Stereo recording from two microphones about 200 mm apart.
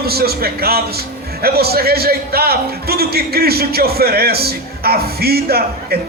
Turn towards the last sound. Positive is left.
turn(degrees=-50)  # may be behind; listen again after turning